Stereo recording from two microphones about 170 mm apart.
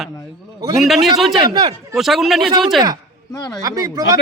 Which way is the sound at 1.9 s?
Centre (ahead or behind).